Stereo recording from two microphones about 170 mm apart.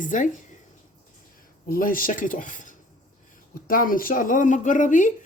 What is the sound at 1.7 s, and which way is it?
Speech, 55° left (ahead or behind).